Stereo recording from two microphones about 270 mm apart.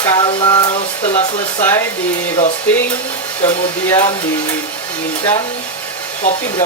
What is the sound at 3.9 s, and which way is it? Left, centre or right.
Speech, centre.